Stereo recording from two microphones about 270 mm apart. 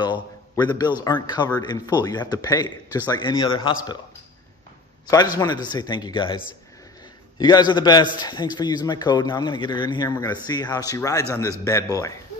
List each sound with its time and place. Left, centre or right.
0.6 s speech: centre
5.0 s a man's voice: centre